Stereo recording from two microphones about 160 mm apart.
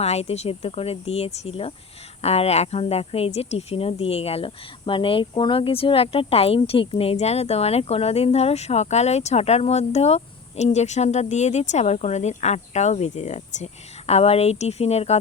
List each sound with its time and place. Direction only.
0.0 s a woman's voice: 40° left (ahead or behind)